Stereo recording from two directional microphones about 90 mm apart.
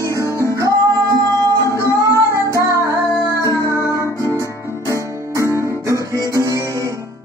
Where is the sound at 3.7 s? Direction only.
30° right (ahead or behind).